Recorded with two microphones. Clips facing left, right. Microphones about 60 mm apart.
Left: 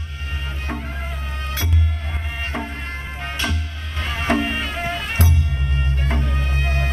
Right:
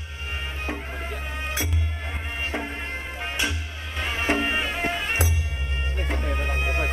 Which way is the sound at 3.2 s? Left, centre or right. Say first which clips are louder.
Left 2 dB; centre.